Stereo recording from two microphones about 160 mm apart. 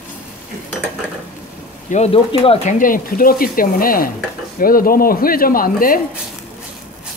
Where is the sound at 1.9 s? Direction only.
40° left (ahead or behind).